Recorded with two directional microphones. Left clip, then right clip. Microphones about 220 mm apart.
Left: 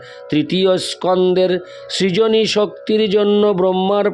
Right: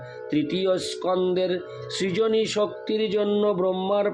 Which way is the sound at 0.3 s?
50° left (ahead or behind).